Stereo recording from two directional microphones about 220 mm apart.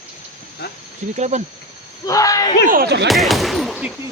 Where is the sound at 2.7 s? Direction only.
45° right (ahead or behind).